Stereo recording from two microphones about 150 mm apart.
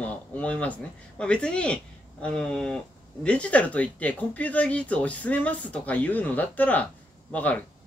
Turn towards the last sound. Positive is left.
turn(degrees=10)  # may be behind; listen again after turning